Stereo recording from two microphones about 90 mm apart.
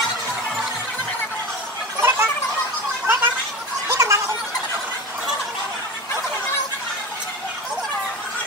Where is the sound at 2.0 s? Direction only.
25° right (ahead or behind).